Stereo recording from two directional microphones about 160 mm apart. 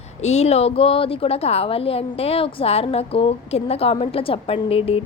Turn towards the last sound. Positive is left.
turn(degrees=35)  # may be behind; listen again after turning